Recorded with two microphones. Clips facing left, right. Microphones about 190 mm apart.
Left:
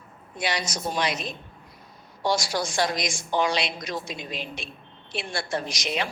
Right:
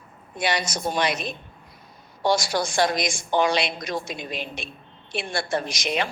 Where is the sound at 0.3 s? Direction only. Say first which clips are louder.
Right 3 dB; 55° right (ahead or behind).